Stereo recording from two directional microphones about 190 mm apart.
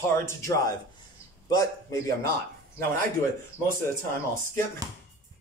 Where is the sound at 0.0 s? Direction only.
15° left (ahead or behind).